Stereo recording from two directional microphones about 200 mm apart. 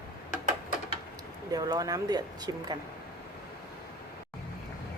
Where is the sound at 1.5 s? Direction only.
20° right (ahead or behind).